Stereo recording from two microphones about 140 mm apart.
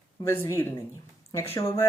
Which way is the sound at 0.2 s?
20° left (ahead or behind).